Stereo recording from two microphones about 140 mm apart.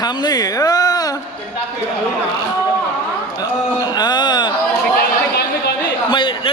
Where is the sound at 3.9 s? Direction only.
30° left (ahead or behind).